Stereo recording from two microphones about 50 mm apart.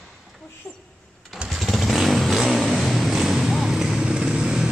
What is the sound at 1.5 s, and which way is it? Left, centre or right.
Vehicle, centre.